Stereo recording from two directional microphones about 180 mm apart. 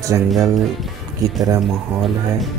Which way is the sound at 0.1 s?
15° right (ahead or behind).